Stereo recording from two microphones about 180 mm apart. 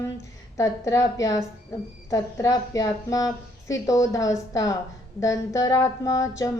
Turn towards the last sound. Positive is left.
turn(degrees=20)  # may be behind; listen again after turning